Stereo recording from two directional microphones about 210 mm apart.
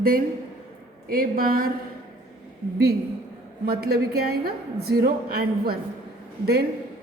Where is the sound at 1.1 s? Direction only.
45° right (ahead or behind).